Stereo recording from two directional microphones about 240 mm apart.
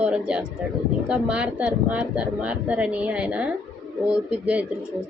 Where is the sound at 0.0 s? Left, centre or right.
Centre.